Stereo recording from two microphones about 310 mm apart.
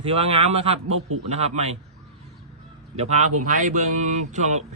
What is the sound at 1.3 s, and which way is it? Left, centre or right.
Speech, right.